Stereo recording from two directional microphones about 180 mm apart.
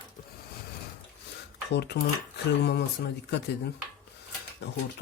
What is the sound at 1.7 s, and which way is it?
Speech, 70° left (ahead or behind).